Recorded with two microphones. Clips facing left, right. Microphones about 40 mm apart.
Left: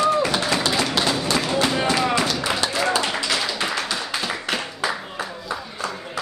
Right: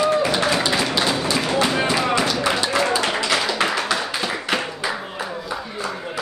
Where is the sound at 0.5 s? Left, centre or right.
Centre.